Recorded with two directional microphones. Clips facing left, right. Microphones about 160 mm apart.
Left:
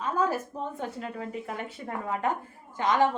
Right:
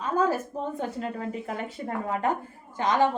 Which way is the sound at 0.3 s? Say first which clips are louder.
Right 3 dB; 40° right (ahead or behind).